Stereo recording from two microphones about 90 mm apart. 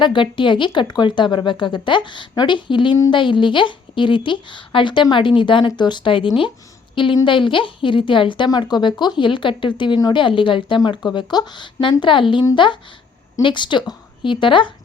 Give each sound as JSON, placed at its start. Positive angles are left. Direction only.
{"t": 0.0, "sound": "a woman's voice", "side_deg": 65}
{"t": 8.4, "sound": "a woman's voice", "side_deg": 50}
{"t": 10.8, "sound": "a woman's voice", "side_deg": 55}